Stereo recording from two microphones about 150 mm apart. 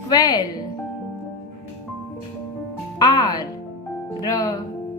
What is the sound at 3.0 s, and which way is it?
Speech, 25° left (ahead or behind).